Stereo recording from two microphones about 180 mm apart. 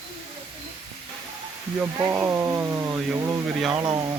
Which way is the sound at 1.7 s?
10° right (ahead or behind).